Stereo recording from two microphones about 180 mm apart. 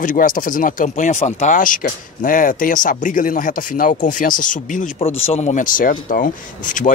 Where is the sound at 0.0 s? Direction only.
50° left (ahead or behind).